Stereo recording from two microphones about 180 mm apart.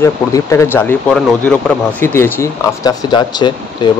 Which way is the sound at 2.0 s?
15° left (ahead or behind).